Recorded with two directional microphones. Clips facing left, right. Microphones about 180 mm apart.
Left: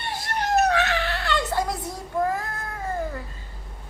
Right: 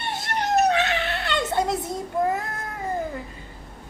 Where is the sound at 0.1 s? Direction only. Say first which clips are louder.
Even; 25° right (ahead or behind).